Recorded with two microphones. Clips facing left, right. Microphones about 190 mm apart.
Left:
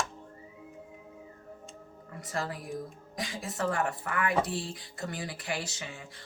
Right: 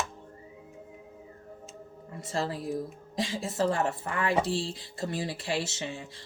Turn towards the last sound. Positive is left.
turn(degrees=-25)  # may be behind; listen again after turning